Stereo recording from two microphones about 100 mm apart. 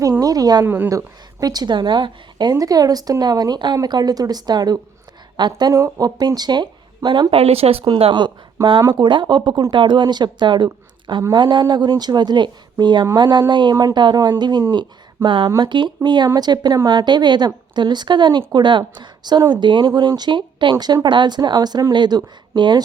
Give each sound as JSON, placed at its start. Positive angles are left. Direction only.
{"t": 0.2, "sound": "a sound", "side_deg": -35}
{"t": 0.6, "sound": "a woman's voice", "side_deg": -20}
{"t": 0.9, "sound": "a woman's voice", "side_deg": -35}
{"t": 5.7, "sound": "speech", "side_deg": -35}
{"t": 8.9, "sound": "speech", "side_deg": -55}